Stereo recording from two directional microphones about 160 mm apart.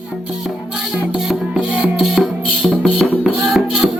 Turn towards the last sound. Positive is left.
turn(degrees=0)  # may be behind; listen again after turning